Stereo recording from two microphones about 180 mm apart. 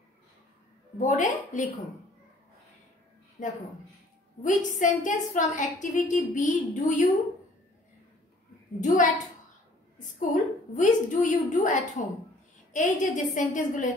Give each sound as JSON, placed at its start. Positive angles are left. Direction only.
{"t": 0.9, "sound": "a woman's voice", "side_deg": 45}
{"t": 3.4, "sound": "a woman's voice", "side_deg": 45}
{"t": 8.8, "sound": "a woman's voice", "side_deg": 45}